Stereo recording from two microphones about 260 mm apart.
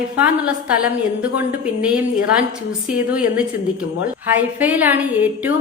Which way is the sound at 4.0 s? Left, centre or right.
Centre.